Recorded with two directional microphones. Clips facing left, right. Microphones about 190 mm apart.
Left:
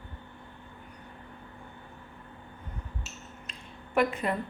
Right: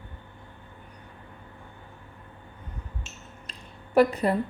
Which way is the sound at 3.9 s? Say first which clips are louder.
Right 6 dB; 35° right (ahead or behind).